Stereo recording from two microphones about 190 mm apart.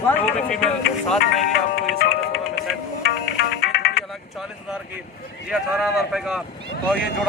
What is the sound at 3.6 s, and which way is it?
Music, 60° left (ahead or behind).